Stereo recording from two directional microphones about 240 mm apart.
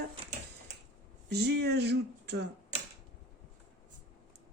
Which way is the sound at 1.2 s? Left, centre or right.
Right.